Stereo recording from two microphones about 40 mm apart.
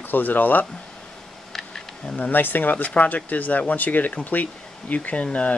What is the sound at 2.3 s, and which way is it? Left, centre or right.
Speech, left.